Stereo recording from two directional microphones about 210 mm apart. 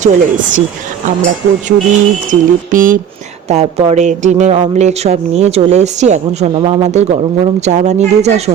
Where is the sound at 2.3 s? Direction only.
40° right (ahead or behind).